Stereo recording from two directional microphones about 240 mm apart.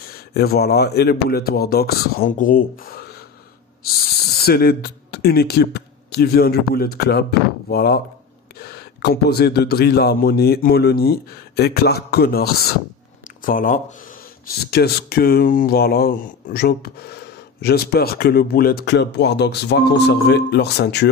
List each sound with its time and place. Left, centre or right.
0.1 s speech: left
4.4 s speech: left